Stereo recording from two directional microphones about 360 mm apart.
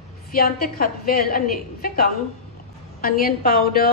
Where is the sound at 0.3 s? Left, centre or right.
Left.